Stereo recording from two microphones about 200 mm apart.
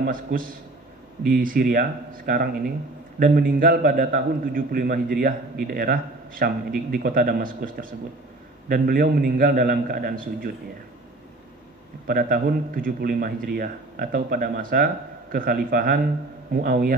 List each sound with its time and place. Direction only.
0.0 s a man's voice: 45° right (ahead or behind)
12.1 s a man's voice: 45° right (ahead or behind)